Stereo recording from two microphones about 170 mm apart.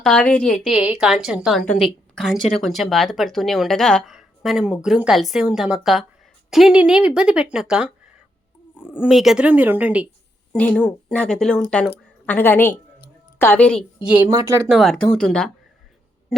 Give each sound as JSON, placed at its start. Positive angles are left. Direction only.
{"t": 0.0, "sound": "speech", "side_deg": 5}
{"t": 10.5, "sound": "speech", "side_deg": 10}
{"t": 14.0, "sound": "speech", "side_deg": -10}
{"t": 14.3, "sound": "speech", "side_deg": -20}
{"t": 14.7, "sound": "speech", "side_deg": 0}